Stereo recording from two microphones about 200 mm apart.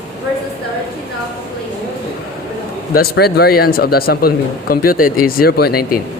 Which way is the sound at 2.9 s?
50° left (ahead or behind).